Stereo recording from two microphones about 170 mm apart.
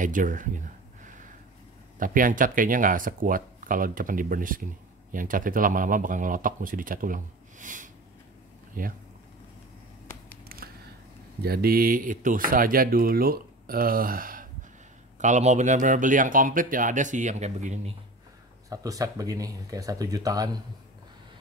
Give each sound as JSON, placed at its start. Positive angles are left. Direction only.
{"t": 0.0, "sound": "a sound", "side_deg": -50}
{"t": 2.0, "sound": "speech", "side_deg": -55}
{"t": 10.4, "sound": "a sound", "side_deg": -60}
{"t": 11.4, "sound": "speech", "side_deg": -65}
{"t": 15.1, "sound": "speech", "side_deg": -45}
{"t": 18.7, "sound": "speech", "side_deg": -20}